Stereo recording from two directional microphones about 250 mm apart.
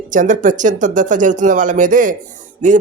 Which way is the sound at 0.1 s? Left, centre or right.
Right.